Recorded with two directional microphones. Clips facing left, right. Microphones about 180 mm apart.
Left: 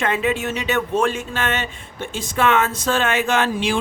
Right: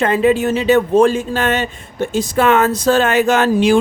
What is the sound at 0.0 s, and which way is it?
Speech, 35° right (ahead or behind).